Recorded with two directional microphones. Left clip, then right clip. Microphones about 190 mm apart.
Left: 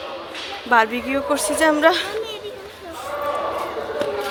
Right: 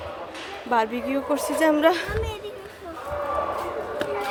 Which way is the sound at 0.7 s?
5° right (ahead or behind).